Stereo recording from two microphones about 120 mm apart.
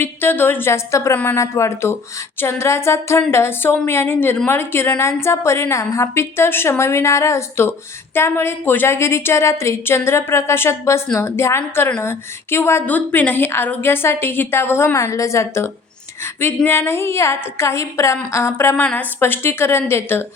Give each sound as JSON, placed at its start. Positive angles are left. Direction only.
{"t": 0.0, "sound": "a woman's voice", "side_deg": 20}